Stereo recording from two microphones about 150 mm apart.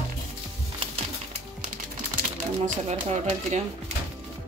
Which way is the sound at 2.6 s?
55° right (ahead or behind).